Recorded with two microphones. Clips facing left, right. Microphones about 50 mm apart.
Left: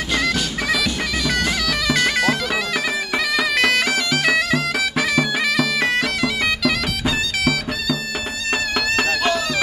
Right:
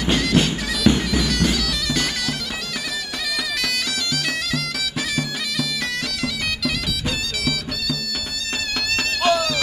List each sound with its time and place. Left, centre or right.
0.4 s bagpipes: right
1.2 s bagpipes: left
3.5 s bagpipes: left